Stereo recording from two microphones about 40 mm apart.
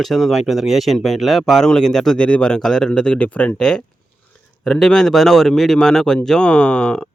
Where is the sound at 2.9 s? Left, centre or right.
Left.